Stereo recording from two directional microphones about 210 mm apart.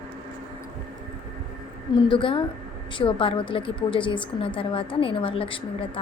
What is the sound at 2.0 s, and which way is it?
A woman's voice, 25° left (ahead or behind).